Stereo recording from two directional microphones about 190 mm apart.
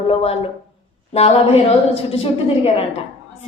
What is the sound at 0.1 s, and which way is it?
A woman's voice, 30° left (ahead or behind).